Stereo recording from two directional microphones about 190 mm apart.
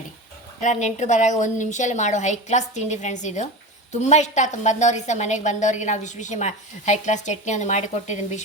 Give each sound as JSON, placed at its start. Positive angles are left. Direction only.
{"t": 0.6, "sound": "a woman's voice", "side_deg": 40}